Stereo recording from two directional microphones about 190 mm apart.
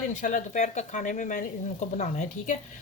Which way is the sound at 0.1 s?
40° left (ahead or behind).